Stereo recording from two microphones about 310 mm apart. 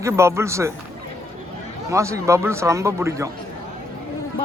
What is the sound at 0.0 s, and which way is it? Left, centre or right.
Speech, centre.